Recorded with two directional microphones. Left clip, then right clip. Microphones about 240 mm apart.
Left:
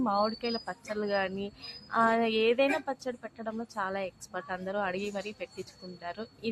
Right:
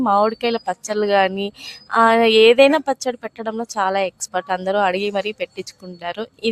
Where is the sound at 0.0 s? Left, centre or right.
Right.